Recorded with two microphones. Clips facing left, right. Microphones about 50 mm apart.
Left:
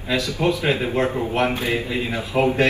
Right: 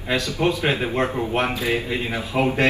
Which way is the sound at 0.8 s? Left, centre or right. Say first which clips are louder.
Left 1 dB; centre.